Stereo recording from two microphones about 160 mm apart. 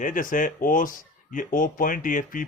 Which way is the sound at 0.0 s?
55° left (ahead or behind).